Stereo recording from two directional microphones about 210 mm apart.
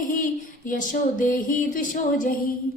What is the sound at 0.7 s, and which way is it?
A woman's voice, 40° left (ahead or behind).